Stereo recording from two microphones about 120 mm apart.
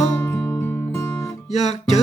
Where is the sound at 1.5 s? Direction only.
65° left (ahead or behind).